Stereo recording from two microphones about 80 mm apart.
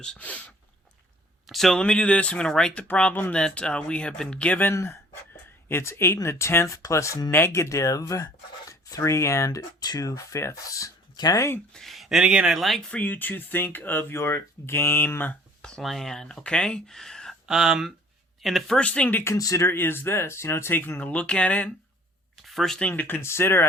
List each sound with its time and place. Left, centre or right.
0.0 s speech: centre
1.5 s speech: centre
1.8 s speech: centre
4.7 s speech: left
9.8 s speech: left
11.7 s speech: centre
12.9 s speech: left
15.6 s speech: centre
17.4 s speech: centre
18.8 s speech: centre
19.2 s speech: left
21.0 s speech: centre
22.4 s speech: centre
22.8 s speech: left